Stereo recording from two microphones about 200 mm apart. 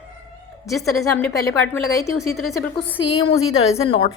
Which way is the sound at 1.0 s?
15° left (ahead or behind).